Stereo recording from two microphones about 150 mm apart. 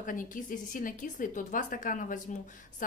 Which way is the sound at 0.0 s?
65° left (ahead or behind).